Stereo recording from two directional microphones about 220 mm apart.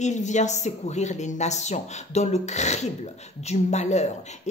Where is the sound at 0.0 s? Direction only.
35° left (ahead or behind).